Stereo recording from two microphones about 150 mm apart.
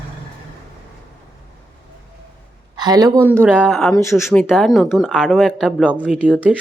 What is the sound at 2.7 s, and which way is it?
Speech, 25° right (ahead or behind).